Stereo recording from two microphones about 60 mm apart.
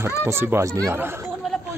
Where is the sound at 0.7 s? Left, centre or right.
Right.